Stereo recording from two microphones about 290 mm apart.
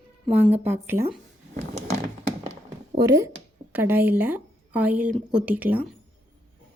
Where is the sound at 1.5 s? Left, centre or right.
Right.